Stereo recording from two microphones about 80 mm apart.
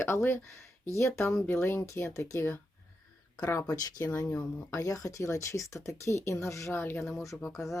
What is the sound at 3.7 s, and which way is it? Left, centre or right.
Speech, left.